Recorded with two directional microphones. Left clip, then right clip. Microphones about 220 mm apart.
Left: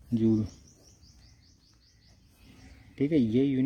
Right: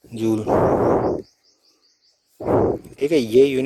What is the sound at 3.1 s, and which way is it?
Speech, 50° right (ahead or behind).